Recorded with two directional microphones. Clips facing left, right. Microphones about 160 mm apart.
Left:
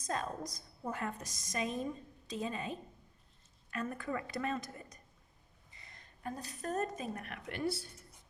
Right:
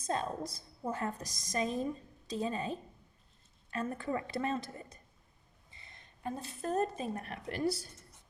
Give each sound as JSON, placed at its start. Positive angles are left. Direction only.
{"t": 0.0, "sound": "a woman's voice", "side_deg": -30}